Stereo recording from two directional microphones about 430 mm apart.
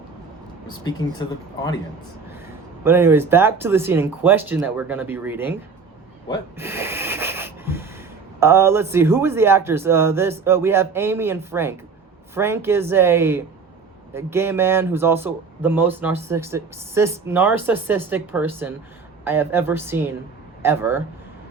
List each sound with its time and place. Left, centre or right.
0.9 s speech: centre
2.8 s speech: centre
6.6 s snort: centre
8.4 s speech: centre